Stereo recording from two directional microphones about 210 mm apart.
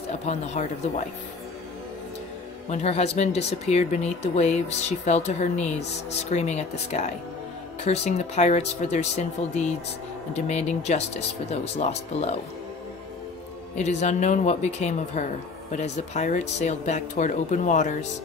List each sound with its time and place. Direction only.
0.1 s speech: 30° left (ahead or behind)
2.7 s speech: 30° left (ahead or behind)
13.7 s speech: 35° left (ahead or behind)